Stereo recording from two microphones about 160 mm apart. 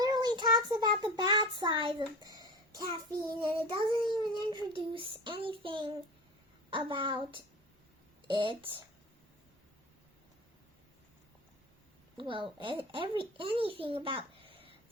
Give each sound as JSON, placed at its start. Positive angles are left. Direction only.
{"t": 0.0, "sound": "a child's voice", "side_deg": -25}
{"t": 12.1, "sound": "a child's voice", "side_deg": -30}